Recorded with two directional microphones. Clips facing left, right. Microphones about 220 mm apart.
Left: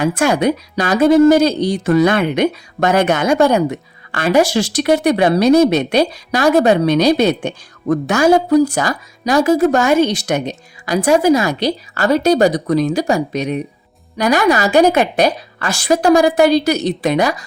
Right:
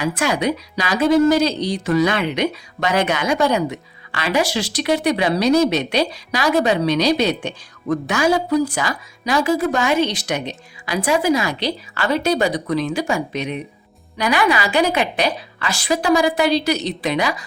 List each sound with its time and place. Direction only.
0.0 s speech: 50° left (ahead or behind)